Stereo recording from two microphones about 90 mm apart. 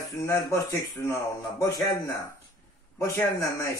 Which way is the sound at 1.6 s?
35° left (ahead or behind).